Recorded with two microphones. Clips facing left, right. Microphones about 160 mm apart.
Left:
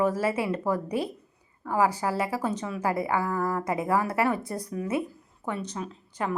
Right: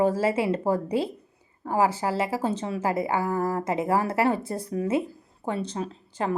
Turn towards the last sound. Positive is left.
turn(degrees=-30)  # may be behind; listen again after turning